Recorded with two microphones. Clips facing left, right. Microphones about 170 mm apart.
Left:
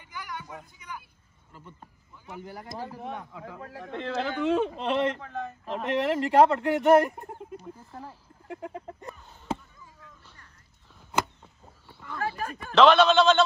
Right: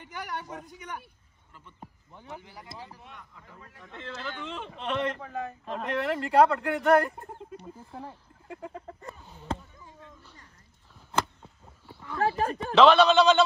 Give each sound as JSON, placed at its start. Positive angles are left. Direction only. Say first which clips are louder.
{"t": 0.7, "sound": "a man's voice", "louder": "right 2 dB", "side_deg": -65}
{"t": 1.5, "sound": "speech", "louder": "left 1 dB", "side_deg": 40}
{"t": 4.6, "sound": "a man's voice", "louder": "left 4 dB", "side_deg": 35}
{"t": 5.2, "sound": "speech", "louder": "even", "side_deg": -5}
{"t": 5.9, "sound": "speech", "louder": "left 4 dB", "side_deg": 25}
{"t": 7.9, "sound": "speech", "louder": "right 4 dB", "side_deg": 0}
{"t": 8.5, "sound": "chicken", "louder": "left 3 dB", "side_deg": 15}
{"t": 9.0, "sound": "a sound", "louder": "left 1 dB", "side_deg": 0}
{"t": 9.8, "sound": "children playing", "louder": "right 5 dB", "side_deg": -25}
{"t": 10.2, "sound": "a sound", "louder": "right 2 dB", "side_deg": -20}
{"t": 12.2, "sound": "speech", "louder": "right 6 dB", "side_deg": -30}
{"t": 12.7, "sound": "speech", "louder": "even", "side_deg": -5}